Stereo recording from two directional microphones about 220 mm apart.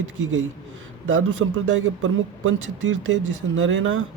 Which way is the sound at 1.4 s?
75° right (ahead or behind).